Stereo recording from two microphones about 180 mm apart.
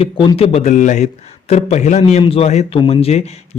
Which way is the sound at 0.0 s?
30° left (ahead or behind).